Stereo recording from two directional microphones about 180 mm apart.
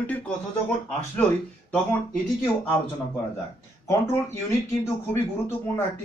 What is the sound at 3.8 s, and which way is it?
Speech, 15° left (ahead or behind).